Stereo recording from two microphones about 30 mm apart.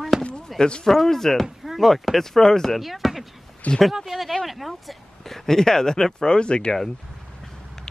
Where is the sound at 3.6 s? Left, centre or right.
Left.